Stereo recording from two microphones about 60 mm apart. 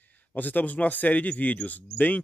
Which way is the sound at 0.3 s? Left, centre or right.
Left.